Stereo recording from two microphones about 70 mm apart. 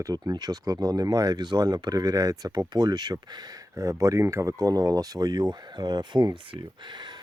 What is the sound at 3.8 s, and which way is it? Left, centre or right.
Speech, right.